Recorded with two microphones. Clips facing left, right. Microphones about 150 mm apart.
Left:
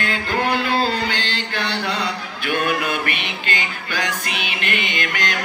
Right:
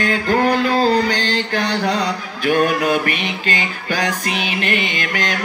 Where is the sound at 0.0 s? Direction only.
45° right (ahead or behind).